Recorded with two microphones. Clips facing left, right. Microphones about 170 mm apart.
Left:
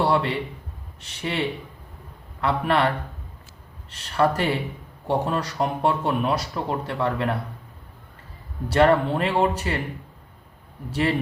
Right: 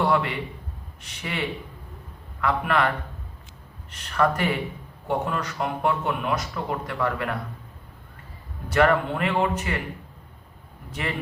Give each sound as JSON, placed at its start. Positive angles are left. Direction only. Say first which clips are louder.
{"t": 0.0, "sound": "a man's voice", "louder": "left 1 dB", "side_deg": 30}
{"t": 3.9, "sound": "speech", "louder": "left 2 dB", "side_deg": 30}
{"t": 8.7, "sound": "speech", "louder": "left 2 dB", "side_deg": 30}